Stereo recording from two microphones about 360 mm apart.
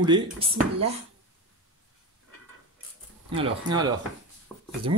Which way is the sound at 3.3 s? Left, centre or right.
Centre.